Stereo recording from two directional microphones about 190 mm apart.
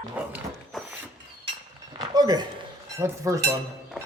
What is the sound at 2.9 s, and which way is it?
Cutlery, 15° right (ahead or behind).